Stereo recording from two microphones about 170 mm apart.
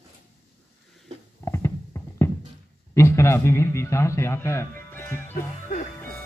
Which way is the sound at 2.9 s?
15° left (ahead or behind).